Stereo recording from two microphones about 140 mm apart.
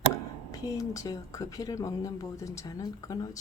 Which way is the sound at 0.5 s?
25° left (ahead or behind).